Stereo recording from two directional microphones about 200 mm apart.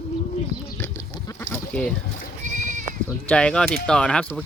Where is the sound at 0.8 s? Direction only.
15° left (ahead or behind).